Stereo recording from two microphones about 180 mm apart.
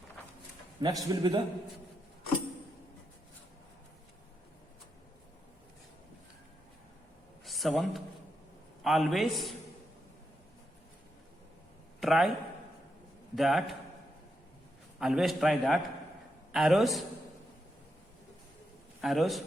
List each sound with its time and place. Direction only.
0.8 s a man's voice: 20° right (ahead or behind)
7.4 s a sound: centre (ahead or behind)
8.8 s a man's voice: centre (ahead or behind)
11.9 s a man's voice: centre (ahead or behind)
13.3 s a man's voice: centre (ahead or behind)
14.9 s a man's voice: 5° right (ahead or behind)
19.0 s a man's voice: centre (ahead or behind)